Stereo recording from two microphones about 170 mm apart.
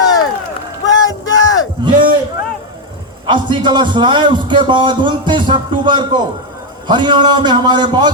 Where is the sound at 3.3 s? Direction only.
30° right (ahead or behind).